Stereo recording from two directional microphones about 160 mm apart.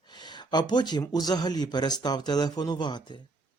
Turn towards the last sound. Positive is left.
turn(degrees=30)  # may be behind; listen again after turning